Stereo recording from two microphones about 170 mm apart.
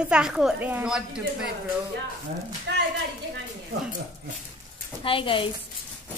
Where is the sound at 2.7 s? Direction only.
90° right.